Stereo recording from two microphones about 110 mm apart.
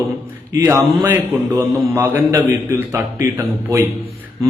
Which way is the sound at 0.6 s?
20° right (ahead or behind).